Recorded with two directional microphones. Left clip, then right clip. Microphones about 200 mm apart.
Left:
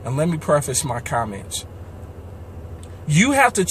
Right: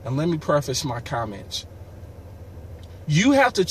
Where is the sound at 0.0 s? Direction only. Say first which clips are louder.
Left 2 dB; centre (ahead or behind).